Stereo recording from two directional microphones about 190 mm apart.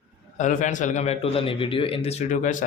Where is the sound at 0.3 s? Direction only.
40° left (ahead or behind).